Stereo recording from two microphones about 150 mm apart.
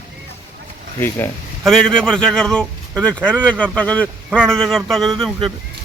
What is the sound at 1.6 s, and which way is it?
A man's voice, 5° left (ahead or behind).